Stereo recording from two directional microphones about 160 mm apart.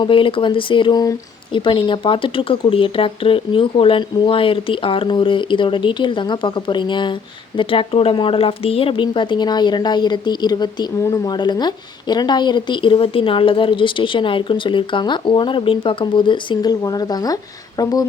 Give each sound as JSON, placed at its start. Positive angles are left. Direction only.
{"t": 0.0, "sound": "speech", "side_deg": 30}